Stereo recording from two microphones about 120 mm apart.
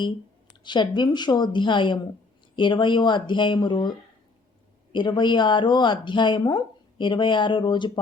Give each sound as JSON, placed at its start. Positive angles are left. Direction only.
{"t": 0.6, "sound": "speech", "side_deg": 40}